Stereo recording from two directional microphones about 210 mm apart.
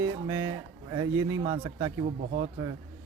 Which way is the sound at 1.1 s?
75° right (ahead or behind).